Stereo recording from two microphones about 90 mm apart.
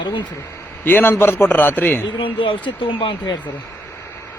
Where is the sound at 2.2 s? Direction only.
65° left (ahead or behind).